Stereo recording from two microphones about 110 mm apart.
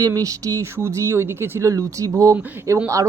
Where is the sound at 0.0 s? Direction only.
30° right (ahead or behind).